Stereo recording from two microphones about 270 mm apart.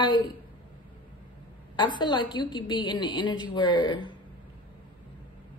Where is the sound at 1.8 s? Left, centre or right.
Centre.